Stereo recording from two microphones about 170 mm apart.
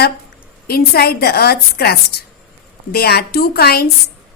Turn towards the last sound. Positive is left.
turn(degrees=65)  # may be behind; listen again after turning